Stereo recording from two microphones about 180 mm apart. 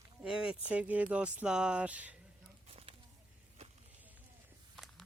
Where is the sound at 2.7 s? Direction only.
35° right (ahead or behind).